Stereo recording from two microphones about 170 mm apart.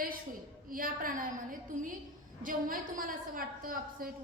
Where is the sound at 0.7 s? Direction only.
55° right (ahead or behind).